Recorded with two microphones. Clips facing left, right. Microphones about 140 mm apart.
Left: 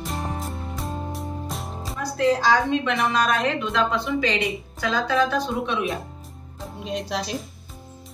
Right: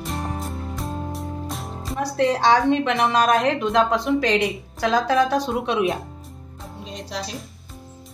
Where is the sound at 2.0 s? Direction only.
70° right (ahead or behind).